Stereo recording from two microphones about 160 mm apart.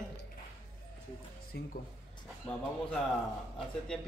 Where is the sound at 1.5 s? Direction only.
90° left.